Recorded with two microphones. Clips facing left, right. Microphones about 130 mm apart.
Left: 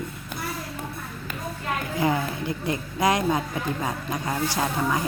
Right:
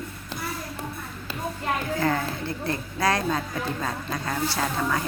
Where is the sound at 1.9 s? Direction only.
15° left (ahead or behind).